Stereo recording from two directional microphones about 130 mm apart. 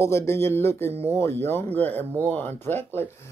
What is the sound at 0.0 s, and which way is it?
Speech, 20° left (ahead or behind).